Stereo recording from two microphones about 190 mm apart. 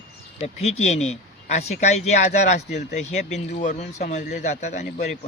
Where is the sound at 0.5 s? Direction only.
35° left (ahead or behind).